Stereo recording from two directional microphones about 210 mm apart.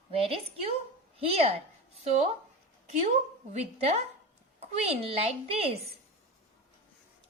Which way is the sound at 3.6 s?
30° right (ahead or behind).